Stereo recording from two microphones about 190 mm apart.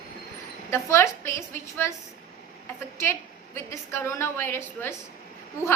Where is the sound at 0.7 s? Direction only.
15° left (ahead or behind).